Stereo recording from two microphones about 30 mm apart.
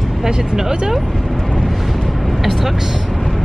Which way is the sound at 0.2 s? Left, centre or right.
Right.